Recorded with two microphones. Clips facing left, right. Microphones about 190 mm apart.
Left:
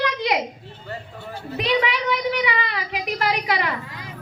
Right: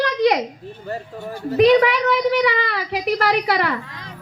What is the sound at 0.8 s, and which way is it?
A woman's voice, 45° right (ahead or behind).